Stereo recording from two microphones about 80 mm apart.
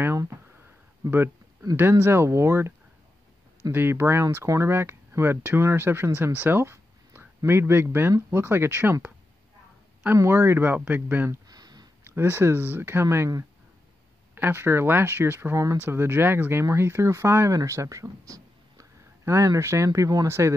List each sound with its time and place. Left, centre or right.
1.8 s speech: right
3.7 s speech: right
10.1 s speech: right
11.4 s a sound: right
12.0 s speech: right
14.3 s speech: right
20.2 s speech: right